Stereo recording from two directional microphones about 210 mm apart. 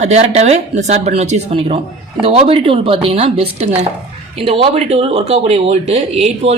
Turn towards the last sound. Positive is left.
turn(degrees=-30)  # may be behind; listen again after turning